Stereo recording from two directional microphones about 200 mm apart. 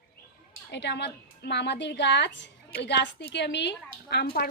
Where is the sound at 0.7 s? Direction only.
60° left (ahead or behind).